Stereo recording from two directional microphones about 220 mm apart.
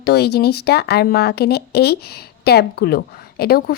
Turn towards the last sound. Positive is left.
turn(degrees=45)  # may be behind; listen again after turning